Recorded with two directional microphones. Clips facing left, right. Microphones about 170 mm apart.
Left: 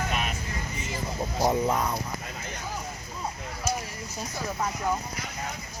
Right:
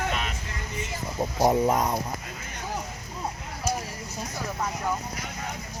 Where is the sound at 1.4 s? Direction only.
20° right (ahead or behind).